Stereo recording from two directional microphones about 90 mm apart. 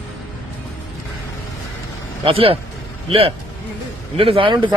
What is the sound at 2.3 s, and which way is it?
Speech, 90° right.